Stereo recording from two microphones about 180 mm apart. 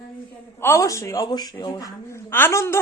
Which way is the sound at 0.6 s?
15° left (ahead or behind).